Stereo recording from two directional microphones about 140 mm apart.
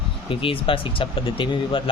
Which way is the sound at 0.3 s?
40° left (ahead or behind).